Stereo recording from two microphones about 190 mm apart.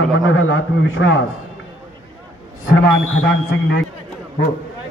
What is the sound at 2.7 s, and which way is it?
Speech, 90° left.